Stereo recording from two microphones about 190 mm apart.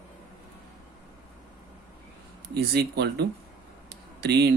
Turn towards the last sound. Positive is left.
turn(degrees=-60)  # may be behind; listen again after turning